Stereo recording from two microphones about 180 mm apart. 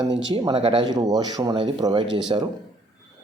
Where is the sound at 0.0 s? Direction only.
25° right (ahead or behind).